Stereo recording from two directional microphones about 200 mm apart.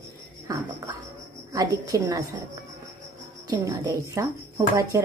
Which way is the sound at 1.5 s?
15° right (ahead or behind).